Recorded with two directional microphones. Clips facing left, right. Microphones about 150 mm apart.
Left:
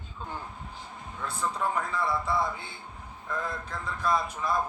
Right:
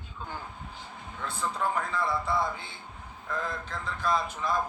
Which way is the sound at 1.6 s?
Centre (ahead or behind).